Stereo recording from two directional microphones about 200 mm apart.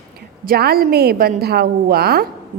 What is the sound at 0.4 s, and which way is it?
Speech, 50° right (ahead or behind).